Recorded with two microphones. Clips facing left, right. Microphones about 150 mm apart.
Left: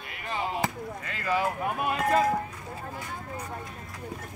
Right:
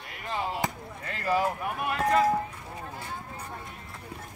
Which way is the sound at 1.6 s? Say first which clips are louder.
Left 1 dB; 25° left (ahead or behind).